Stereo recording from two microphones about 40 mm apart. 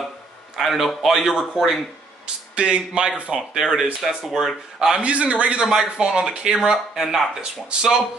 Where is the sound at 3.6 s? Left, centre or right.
Centre.